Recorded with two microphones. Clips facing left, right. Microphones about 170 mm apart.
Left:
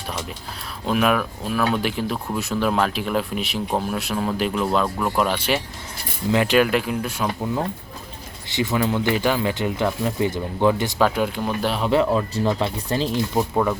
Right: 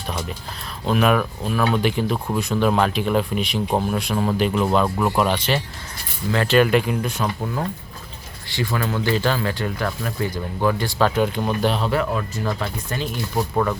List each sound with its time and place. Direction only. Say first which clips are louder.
0.9 s speech: right 1 dB; centre (ahead or behind)
5.4 s speech: even; 10° left (ahead or behind)
6.7 s speech: right 3 dB; centre (ahead or behind)
8.4 s speech: left 3 dB; 20° left (ahead or behind)
10.9 s speech: right 1 dB; 5° left (ahead or behind)
11.9 s speech: left 4 dB; 25° left (ahead or behind)